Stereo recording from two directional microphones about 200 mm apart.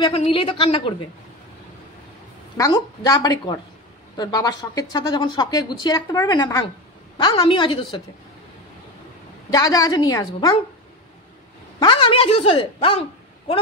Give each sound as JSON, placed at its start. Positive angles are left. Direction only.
{"t": 0.0, "sound": "speech", "side_deg": 30}
{"t": 2.5, "sound": "speech", "side_deg": 15}
{"t": 9.5, "sound": "a woman's voice", "side_deg": 20}
{"t": 11.8, "sound": "speech", "side_deg": 25}